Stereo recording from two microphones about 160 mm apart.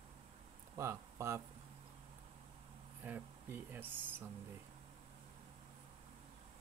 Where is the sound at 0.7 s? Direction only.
20° right (ahead or behind).